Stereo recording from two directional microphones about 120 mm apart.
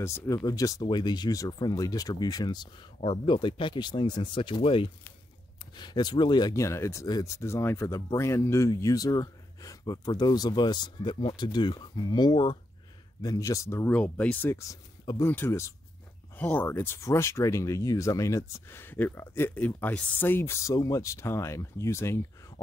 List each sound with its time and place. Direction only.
0.0 s speech: 25° left (ahead or behind)
6.5 s speech: 25° left (ahead or behind); by 12.5 s 40° left (ahead or behind)
13.2 s speech: 30° left (ahead or behind)
13.9 s speech: 10° left (ahead or behind)
14.7 s speech: 25° left (ahead or behind)